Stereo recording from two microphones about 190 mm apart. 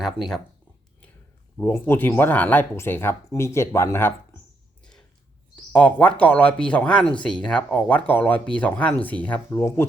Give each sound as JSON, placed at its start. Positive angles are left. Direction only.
{"t": 0.0, "sound": "speech", "side_deg": 0}
{"t": 1.5, "sound": "speech", "side_deg": 10}
{"t": 5.7, "sound": "speech", "side_deg": 5}